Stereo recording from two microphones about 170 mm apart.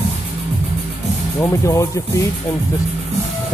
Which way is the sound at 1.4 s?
15° left (ahead or behind).